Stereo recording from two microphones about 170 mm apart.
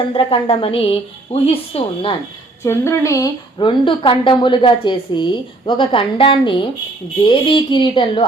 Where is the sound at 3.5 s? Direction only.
30° left (ahead or behind).